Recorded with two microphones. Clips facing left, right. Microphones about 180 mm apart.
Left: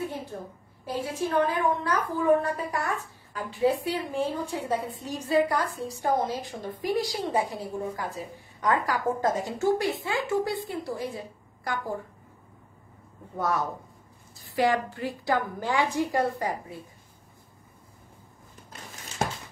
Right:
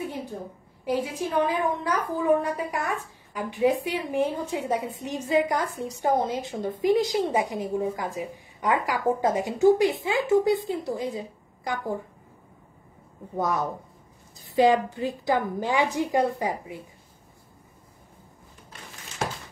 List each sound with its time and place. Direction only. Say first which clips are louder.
0.3 s a woman's voice: right 2 dB; 20° right (ahead or behind)
13.4 s a woman's voice: right 2 dB; 15° right (ahead or behind)